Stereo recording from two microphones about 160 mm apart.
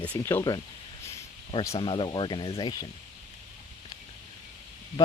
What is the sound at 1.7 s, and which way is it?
Speech, 30° left (ahead or behind).